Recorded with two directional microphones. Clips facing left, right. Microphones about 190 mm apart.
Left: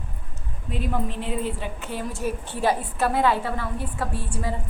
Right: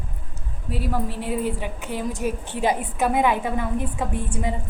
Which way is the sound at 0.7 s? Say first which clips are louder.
Right 1 dB; 5° right (ahead or behind).